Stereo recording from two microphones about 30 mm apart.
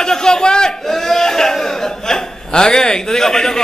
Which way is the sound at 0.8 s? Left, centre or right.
Centre.